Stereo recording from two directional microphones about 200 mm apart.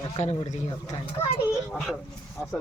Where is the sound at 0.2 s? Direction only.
35° left (ahead or behind).